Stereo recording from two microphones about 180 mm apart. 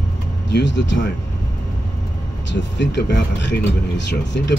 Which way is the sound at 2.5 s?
75° left (ahead or behind).